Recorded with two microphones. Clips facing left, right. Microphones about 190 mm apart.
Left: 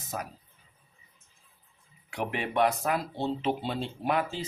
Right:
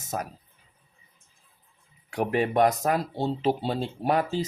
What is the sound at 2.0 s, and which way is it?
Speech, 40° right (ahead or behind).